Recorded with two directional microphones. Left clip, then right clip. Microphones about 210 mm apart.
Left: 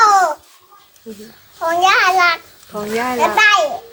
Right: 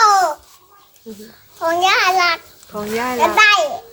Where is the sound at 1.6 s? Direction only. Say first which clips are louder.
Left 2 dB; 20° right (ahead or behind).